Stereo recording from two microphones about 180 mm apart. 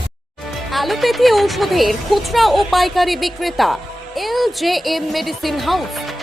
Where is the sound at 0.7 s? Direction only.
Centre (ahead or behind).